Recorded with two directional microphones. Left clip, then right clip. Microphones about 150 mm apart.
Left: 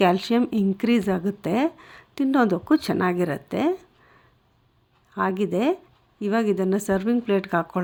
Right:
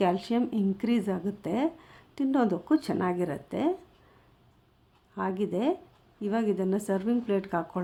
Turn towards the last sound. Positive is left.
turn(degrees=20)  # may be behind; listen again after turning